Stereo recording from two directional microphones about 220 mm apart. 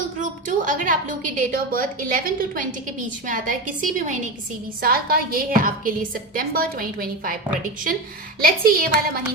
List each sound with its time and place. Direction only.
0.2 s a woman's voice: 35° right (ahead or behind)
8.4 s a woman's voice: 40° right (ahead or behind)